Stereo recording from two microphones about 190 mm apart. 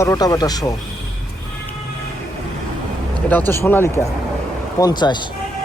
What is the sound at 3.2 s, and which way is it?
Speech, 10° left (ahead or behind).